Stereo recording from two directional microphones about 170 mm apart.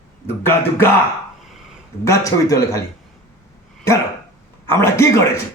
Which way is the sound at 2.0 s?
20° left (ahead or behind).